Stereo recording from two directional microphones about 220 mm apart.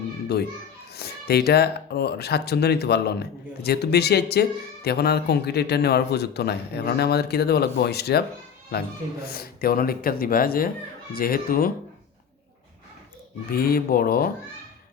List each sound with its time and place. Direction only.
0.9 s speech: 45° left (ahead or behind)
13.5 s speech: 40° left (ahead or behind)